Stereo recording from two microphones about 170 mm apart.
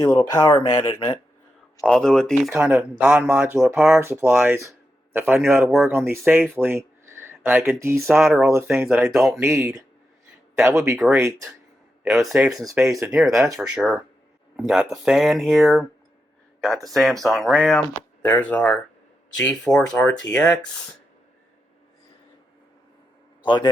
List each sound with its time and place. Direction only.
0.1 s speech: 20° left (ahead or behind)
1.8 s speech: centre (ahead or behind)
5.6 s speech: centre (ahead or behind)
5.9 s speech: 15° right (ahead or behind)
6.6 s a sound: 15° right (ahead or behind)
7.4 s speech: 10° right (ahead or behind)
8.2 s speech: 5° right (ahead or behind)
8.4 s speech: 15° right (ahead or behind)
9.0 s speech: centre (ahead or behind)
9.4 s speech: 15° right (ahead or behind)
10.9 s speech: centre (ahead or behind)
12.6 s speech: 15° right (ahead or behind)
13.1 s speech: centre (ahead or behind)
23.4 s a man's voice: 30° left (ahead or behind)